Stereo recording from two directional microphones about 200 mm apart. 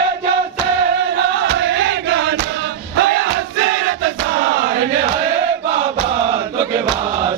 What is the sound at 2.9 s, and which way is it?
Battle cry, 55° right (ahead or behind).